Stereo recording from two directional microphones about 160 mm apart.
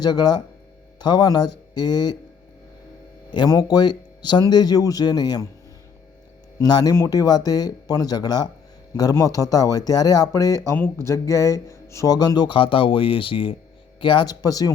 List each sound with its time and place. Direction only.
0.0 s speech: 25° left (ahead or behind)
3.2 s speech: 25° left (ahead or behind)
6.6 s speech: 25° left (ahead or behind)